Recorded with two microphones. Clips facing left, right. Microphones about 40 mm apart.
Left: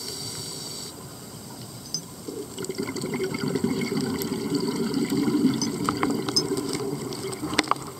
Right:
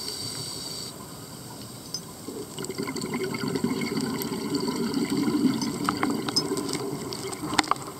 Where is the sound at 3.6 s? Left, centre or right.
Centre.